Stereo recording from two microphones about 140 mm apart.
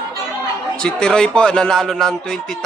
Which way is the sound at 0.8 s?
5° left (ahead or behind).